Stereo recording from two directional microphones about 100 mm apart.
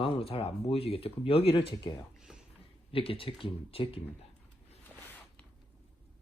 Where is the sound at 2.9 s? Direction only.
70° left (ahead or behind).